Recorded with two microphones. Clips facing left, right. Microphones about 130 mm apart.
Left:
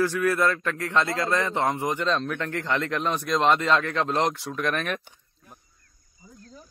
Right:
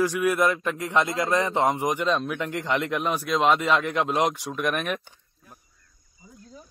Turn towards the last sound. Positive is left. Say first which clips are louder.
# right 1 dB
turn(degrees=0)  # may be behind; listen again after turning